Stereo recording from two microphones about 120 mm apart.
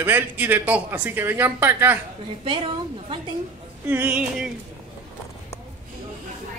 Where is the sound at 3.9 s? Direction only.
15° right (ahead or behind).